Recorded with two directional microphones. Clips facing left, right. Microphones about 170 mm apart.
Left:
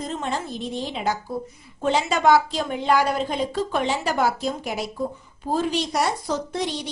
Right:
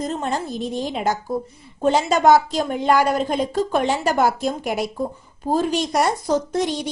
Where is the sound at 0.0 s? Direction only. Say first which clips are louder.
Right 4 dB; 40° right (ahead or behind).